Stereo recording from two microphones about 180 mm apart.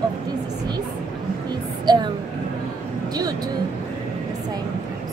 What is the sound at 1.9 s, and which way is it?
Speech, 25° right (ahead or behind).